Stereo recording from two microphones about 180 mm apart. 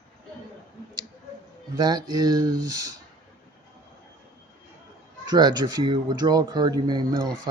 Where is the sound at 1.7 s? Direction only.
25° right (ahead or behind).